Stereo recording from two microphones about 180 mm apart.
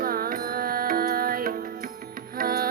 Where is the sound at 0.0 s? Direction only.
55° right (ahead or behind).